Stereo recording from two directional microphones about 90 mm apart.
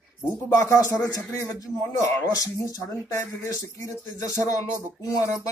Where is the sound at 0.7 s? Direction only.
40° left (ahead or behind).